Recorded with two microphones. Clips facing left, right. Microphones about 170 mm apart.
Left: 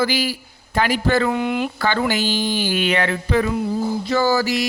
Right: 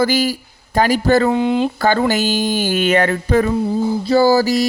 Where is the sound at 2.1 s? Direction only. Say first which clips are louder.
Right 4 dB; 45° right (ahead or behind).